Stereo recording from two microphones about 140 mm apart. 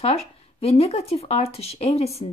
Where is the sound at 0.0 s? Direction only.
45° left (ahead or behind).